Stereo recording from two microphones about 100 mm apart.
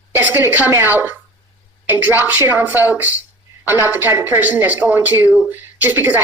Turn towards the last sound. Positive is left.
turn(degrees=-20)  # may be behind; listen again after turning